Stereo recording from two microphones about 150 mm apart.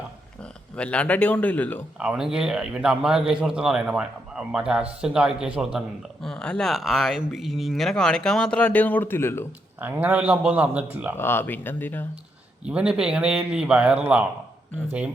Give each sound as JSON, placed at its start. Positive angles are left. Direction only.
{"t": 0.8, "sound": "a man's voice", "side_deg": 5}
{"t": 2.0, "sound": "speech", "side_deg": -5}
{"t": 9.8, "sound": "a man's voice", "side_deg": -10}
{"t": 11.2, "sound": "a man's voice", "side_deg": 15}
{"t": 12.6, "sound": "speech", "side_deg": -5}